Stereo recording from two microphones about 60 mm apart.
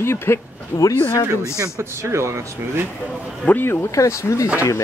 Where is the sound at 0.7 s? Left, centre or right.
Left.